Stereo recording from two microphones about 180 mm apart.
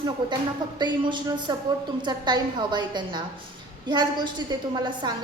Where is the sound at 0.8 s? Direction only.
25° right (ahead or behind).